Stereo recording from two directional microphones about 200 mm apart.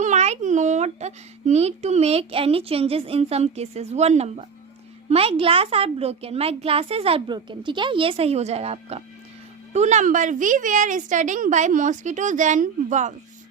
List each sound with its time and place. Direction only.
0.0 s a child's voice: 35° right (ahead or behind)